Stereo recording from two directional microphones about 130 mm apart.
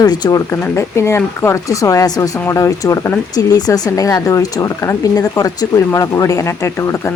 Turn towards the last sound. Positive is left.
turn(degrees=20)  # may be behind; listen again after turning